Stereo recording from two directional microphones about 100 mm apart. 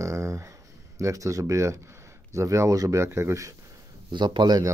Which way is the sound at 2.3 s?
30° right (ahead or behind).